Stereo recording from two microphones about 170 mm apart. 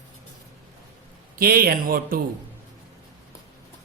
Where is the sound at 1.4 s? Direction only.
60° right (ahead or behind).